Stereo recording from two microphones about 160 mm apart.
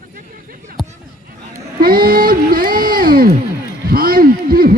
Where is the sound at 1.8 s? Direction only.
65° right (ahead or behind).